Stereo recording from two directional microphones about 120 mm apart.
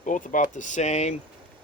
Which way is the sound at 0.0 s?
90° left.